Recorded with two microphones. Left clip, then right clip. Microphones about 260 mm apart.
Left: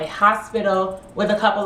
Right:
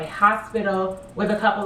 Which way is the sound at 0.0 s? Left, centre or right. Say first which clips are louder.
Left 2 dB; left.